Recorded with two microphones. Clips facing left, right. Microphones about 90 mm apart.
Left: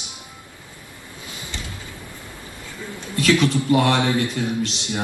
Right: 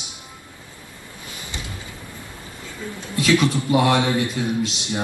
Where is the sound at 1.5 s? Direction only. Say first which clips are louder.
Even; 15° right (ahead or behind).